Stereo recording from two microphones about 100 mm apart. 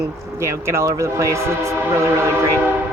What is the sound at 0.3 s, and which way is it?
Speech, 25° right (ahead or behind).